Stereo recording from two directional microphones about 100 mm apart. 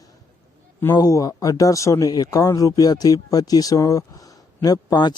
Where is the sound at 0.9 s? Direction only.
40° left (ahead or behind).